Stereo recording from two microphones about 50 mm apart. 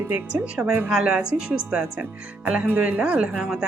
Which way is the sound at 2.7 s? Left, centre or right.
Right.